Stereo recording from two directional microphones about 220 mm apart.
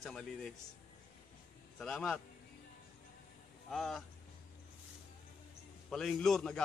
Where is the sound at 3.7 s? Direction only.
Centre (ahead or behind).